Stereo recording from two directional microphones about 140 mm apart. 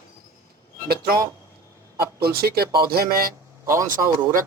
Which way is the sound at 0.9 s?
90° right.